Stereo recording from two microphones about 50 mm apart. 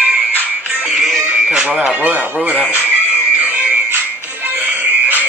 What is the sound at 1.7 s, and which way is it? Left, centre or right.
Speech, right.